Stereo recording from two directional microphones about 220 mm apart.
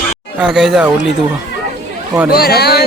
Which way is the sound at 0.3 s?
5° right (ahead or behind).